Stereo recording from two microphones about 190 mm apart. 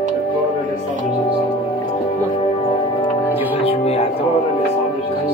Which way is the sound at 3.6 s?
30° left (ahead or behind).